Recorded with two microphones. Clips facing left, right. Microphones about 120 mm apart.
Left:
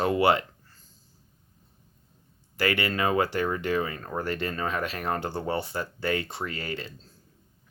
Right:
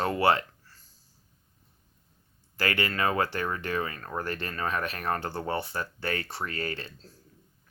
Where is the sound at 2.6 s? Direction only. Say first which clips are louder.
Left 2 dB; 15° left (ahead or behind).